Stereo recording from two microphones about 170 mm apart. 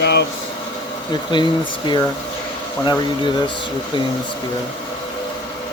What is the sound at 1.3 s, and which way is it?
Speech, 25° left (ahead or behind).